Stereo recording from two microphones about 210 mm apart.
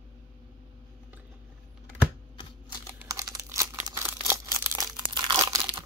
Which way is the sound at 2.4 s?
20° left (ahead or behind).